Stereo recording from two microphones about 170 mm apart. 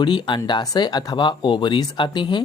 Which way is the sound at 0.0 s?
25° left (ahead or behind).